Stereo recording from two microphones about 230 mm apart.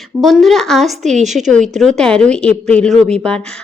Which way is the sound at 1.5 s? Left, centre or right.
Centre.